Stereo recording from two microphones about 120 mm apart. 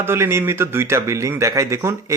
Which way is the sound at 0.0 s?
20° right (ahead or behind).